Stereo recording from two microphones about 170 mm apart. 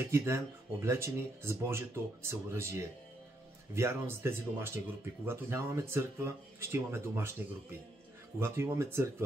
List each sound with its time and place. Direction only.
0.1 s speech: 15° right (ahead or behind)
3.7 s speech: 15° right (ahead or behind)
8.4 s speech: 15° right (ahead or behind)